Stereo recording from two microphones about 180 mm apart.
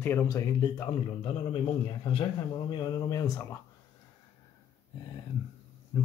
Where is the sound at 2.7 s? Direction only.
20° left (ahead or behind).